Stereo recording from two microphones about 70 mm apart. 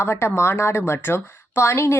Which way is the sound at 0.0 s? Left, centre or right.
Left.